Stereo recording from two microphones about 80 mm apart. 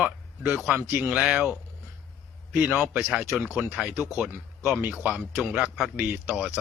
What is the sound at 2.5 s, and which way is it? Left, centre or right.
Speech, centre.